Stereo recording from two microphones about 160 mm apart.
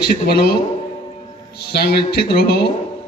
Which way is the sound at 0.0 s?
80° left.